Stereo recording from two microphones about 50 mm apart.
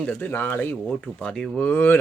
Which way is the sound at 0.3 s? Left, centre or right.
Left.